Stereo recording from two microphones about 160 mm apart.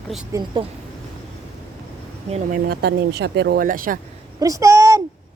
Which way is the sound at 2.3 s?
45° right (ahead or behind).